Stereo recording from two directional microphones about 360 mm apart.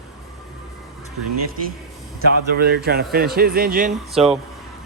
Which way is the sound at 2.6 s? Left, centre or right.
Right.